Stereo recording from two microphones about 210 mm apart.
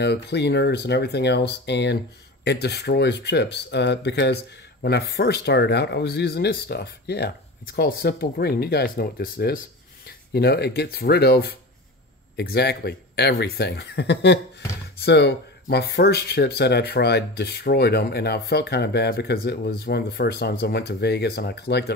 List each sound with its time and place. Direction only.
0.0 s speech: 55° left (ahead or behind)